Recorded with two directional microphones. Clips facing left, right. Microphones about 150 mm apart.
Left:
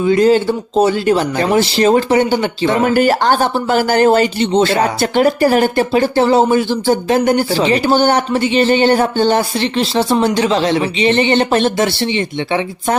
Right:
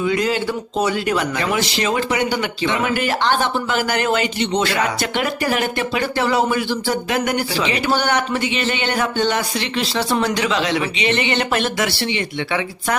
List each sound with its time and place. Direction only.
0.0 s speech: 35° left (ahead or behind)